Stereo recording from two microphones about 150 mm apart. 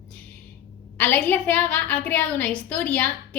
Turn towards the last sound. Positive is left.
turn(degrees=10)  # may be behind; listen again after turning